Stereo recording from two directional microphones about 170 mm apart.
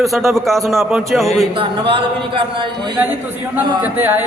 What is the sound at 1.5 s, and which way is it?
Speech, 30° right (ahead or behind).